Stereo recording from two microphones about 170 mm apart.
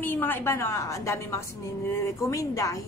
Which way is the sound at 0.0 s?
10° left (ahead or behind).